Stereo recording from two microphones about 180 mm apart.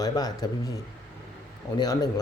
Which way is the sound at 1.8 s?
20° left (ahead or behind).